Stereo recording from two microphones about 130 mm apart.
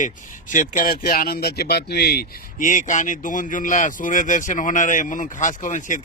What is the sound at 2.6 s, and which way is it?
A man's voice, 80° left.